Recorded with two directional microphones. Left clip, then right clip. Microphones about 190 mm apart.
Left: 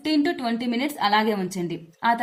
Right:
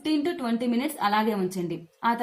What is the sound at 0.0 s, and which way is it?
Speech, 35° left (ahead or behind).